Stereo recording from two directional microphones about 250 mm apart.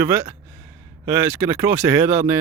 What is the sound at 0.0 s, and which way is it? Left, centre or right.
Speech, centre.